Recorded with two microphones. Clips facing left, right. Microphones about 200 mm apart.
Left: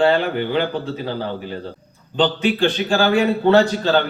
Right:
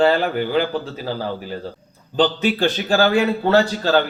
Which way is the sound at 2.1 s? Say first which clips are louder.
Even; 40° right (ahead or behind).